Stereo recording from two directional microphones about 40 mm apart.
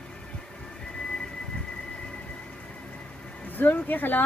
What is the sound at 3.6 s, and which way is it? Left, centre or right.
Speech, left.